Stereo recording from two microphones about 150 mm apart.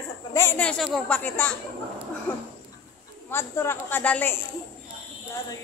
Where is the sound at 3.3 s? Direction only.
15° left (ahead or behind).